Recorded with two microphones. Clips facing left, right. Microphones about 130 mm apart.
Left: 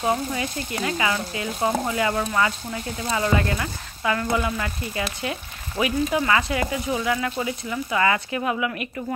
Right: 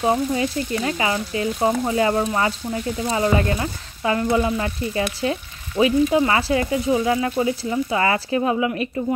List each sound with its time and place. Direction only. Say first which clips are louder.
0.0 s speech: right 4 dB; 30° right (ahead or behind)